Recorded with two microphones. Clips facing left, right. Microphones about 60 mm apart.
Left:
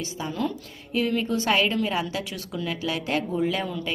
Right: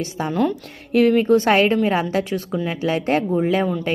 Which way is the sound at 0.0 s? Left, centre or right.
Right.